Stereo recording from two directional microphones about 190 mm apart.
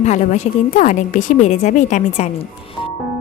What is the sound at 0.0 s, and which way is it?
A woman's voice, 40° left (ahead or behind).